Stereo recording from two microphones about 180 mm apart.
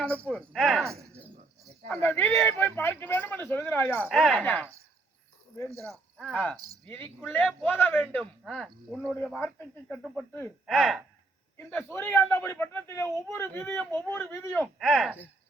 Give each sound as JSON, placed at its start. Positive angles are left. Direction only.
{"t": 0.3, "sound": "a man's voice", "side_deg": 5}
{"t": 4.0, "sound": "speech", "side_deg": 0}
{"t": 5.7, "sound": "speech", "side_deg": -15}
{"t": 6.1, "sound": "a man's voice", "side_deg": 5}
{"t": 9.9, "sound": "speech", "side_deg": 0}
{"t": 10.3, "sound": "a man's voice", "side_deg": 10}
{"t": 10.8, "sound": "speech", "side_deg": 0}
{"t": 11.5, "sound": "a man's voice", "side_deg": 15}